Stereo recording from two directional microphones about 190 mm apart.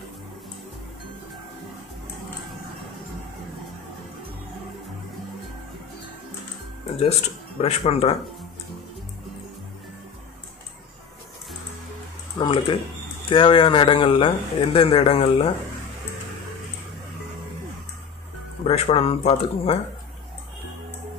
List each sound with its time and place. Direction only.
7.6 s speech: 30° left (ahead or behind)
12.4 s speech: 25° left (ahead or behind)
18.6 s speech: 35° left (ahead or behind)